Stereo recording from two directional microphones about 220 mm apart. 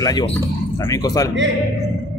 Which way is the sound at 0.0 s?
20° left (ahead or behind).